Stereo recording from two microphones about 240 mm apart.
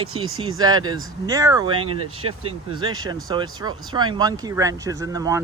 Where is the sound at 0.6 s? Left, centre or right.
Centre.